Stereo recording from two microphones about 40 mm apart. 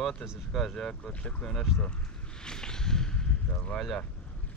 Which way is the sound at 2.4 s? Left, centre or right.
Centre.